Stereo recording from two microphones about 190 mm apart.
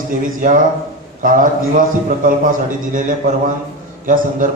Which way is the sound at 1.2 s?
45° right (ahead or behind).